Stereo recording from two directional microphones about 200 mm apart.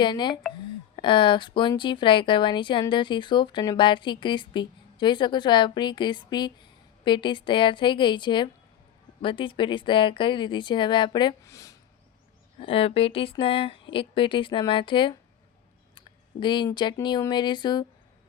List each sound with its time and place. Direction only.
0.0 s speech: 25° left (ahead or behind)
12.5 s speech: 30° left (ahead or behind)